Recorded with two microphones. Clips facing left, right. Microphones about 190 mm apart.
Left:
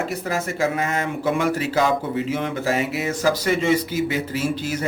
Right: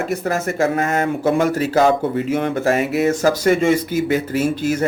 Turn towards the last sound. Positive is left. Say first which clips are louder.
# right 5 dB
turn(degrees=-50)  # may be behind; listen again after turning